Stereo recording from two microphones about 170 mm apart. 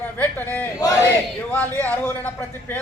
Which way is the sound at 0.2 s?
10° left (ahead or behind).